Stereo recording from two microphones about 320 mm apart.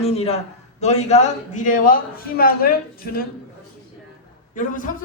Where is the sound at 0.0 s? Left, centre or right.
Centre.